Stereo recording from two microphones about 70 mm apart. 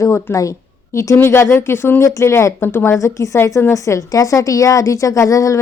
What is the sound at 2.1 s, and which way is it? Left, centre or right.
A woman's voice, left.